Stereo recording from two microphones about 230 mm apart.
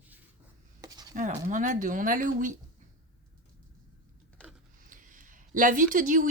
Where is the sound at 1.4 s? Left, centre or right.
Right.